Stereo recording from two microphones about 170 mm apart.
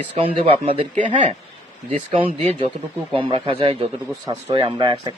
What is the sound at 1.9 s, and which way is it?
Speech, 35° right (ahead or behind).